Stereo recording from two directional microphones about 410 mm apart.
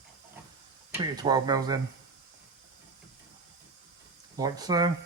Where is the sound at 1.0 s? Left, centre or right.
Centre.